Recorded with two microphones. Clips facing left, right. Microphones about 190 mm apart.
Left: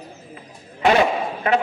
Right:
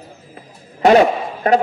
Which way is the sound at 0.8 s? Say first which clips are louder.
Right 6 dB; 40° right (ahead or behind).